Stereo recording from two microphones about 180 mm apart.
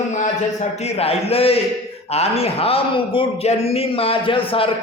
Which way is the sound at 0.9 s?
35° left (ahead or behind).